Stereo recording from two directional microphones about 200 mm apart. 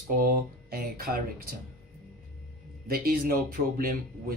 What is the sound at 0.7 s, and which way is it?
Speech, 45° right (ahead or behind).